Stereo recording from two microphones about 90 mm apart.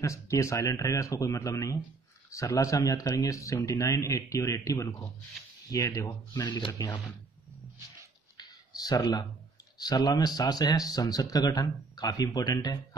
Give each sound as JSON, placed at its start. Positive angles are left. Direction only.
{"t": 0.0, "sound": "speech", "side_deg": 35}
{"t": 6.3, "sound": "speech", "side_deg": 55}
{"t": 6.8, "sound": "speech", "side_deg": 45}
{"t": 8.4, "sound": "a sound", "side_deg": 45}
{"t": 9.8, "sound": "speech", "side_deg": 45}